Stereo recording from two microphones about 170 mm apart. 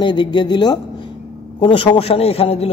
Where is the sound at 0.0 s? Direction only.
25° left (ahead or behind).